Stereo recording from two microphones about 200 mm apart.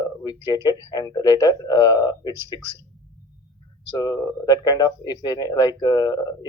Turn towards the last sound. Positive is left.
turn(degrees=20)  # may be behind; listen again after turning